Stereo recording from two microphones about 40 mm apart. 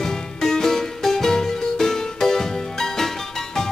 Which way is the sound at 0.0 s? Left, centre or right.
Centre.